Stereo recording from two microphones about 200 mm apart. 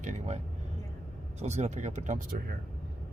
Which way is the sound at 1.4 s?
35° right (ahead or behind).